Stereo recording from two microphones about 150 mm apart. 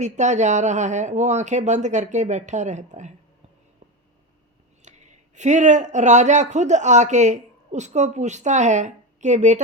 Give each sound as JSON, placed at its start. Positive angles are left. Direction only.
{"t": 0.0, "sound": "speech", "side_deg": -50}
{"t": 4.8, "sound": "speech", "side_deg": -50}